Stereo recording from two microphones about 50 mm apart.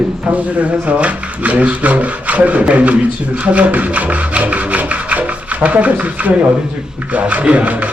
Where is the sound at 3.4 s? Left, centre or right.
Right.